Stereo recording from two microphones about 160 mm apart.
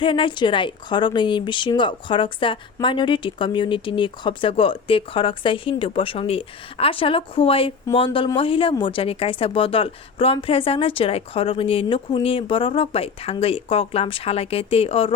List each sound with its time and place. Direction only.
0.0 s a woman's voice: 30° left (ahead or behind)